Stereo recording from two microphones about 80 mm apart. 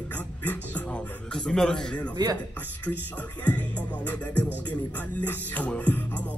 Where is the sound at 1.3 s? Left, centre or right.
Centre.